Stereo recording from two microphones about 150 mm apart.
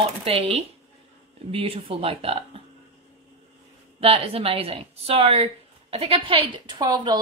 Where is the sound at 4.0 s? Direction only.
40° right (ahead or behind).